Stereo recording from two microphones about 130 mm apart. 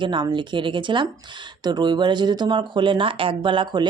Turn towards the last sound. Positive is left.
turn(degrees=-40)  # may be behind; listen again after turning